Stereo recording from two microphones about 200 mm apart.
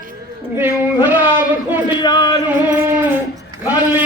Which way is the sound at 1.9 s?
20° left (ahead or behind).